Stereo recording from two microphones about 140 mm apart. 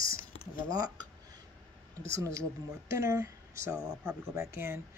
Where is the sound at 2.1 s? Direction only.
20° right (ahead or behind).